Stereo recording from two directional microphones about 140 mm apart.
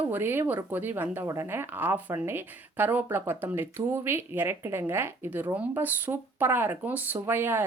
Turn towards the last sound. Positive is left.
turn(degrees=-15)  # may be behind; listen again after turning